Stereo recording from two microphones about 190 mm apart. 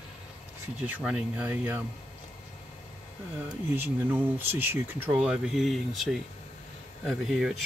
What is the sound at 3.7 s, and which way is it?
Speech, 10° right (ahead or behind).